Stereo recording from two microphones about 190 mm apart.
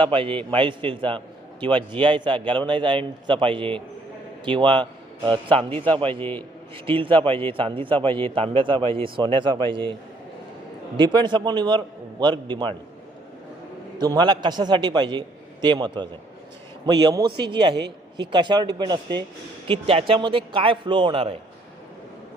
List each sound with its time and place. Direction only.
0.0 s a man's voice: 25° right (ahead or behind)
10.9 s a man's voice: 25° right (ahead or behind)
14.0 s a man's voice: 20° right (ahead or behind)